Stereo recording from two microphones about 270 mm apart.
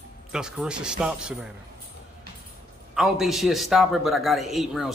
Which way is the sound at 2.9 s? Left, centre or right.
Centre.